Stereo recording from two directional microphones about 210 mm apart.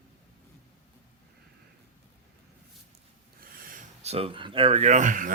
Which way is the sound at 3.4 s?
35° right (ahead or behind).